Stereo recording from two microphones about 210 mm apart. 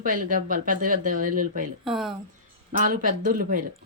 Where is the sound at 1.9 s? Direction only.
Centre (ahead or behind).